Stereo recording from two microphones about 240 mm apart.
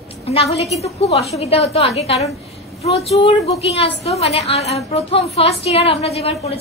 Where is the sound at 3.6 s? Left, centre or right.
Left.